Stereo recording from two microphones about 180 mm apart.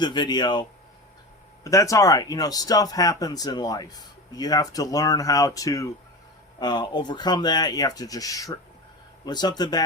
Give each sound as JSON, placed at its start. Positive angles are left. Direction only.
{"t": 0.0, "sound": "speech", "side_deg": 25}
{"t": 1.6, "sound": "speech", "side_deg": 20}